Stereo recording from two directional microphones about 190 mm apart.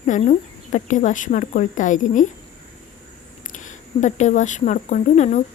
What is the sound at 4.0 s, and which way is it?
Speech, 40° left (ahead or behind).